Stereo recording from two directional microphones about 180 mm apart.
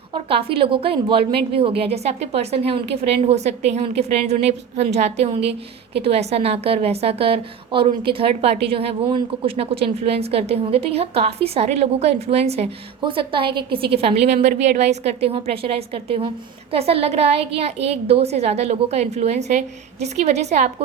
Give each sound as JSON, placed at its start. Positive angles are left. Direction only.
{"t": 0.1, "sound": "a woman's voice", "side_deg": -30}
{"t": 13.5, "sound": "a woman's voice", "side_deg": -60}
{"t": 13.7, "sound": "a woman's voice", "side_deg": -30}